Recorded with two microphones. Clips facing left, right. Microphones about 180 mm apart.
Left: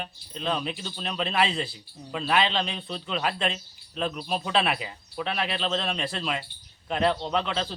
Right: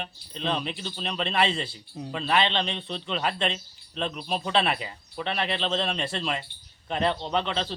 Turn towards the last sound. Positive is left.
turn(degrees=0)  # may be behind; listen again after turning